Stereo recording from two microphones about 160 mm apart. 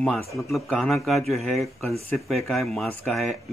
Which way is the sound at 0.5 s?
Centre (ahead or behind).